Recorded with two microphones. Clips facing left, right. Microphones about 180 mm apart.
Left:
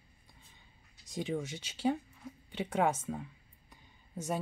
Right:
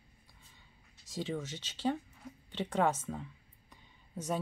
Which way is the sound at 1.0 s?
15° left (ahead or behind).